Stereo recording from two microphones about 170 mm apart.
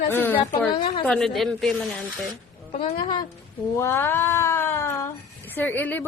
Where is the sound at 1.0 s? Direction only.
5° left (ahead or behind).